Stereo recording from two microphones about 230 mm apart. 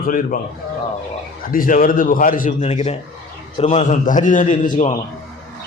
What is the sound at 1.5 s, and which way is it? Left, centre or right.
A man's voice, left.